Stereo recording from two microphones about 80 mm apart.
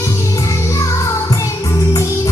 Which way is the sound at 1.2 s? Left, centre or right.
Left.